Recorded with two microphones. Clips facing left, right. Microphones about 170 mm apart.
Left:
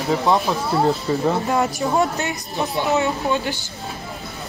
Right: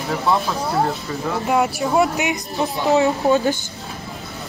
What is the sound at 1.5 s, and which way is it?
Speech, centre (ahead or behind).